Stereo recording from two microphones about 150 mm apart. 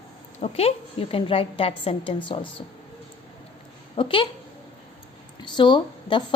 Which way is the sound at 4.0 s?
35° left (ahead or behind).